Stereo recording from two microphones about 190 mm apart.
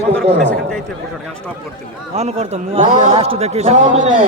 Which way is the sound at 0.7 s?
5° left (ahead or behind).